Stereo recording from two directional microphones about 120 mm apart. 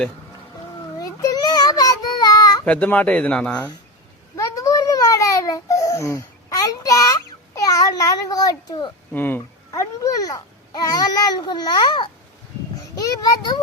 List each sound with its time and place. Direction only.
0.9 s child singing: 30° left (ahead or behind)
2.6 s speech: 10° left (ahead or behind)
4.4 s babbling: 25° left (ahead or behind)
9.1 s a child's voice: 15° left (ahead or behind); by 12.0 s 40° left (ahead or behind)
13.0 s a sound: 30° left (ahead or behind)